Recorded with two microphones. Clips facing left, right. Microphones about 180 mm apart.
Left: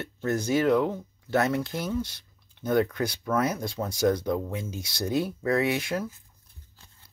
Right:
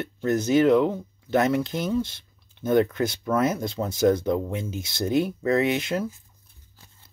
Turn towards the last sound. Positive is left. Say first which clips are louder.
# right 3 dB
turn(degrees=-25)  # may be behind; listen again after turning